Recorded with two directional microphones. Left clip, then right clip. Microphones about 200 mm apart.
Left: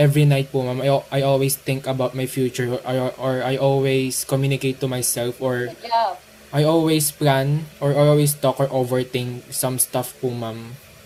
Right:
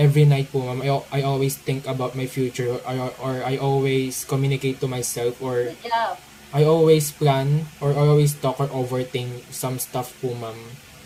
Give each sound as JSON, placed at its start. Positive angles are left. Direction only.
{"t": 0.0, "sound": "speech", "side_deg": 40}